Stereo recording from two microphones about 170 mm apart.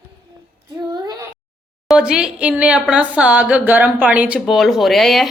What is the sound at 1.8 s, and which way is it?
A woman's voice, 5° right (ahead or behind).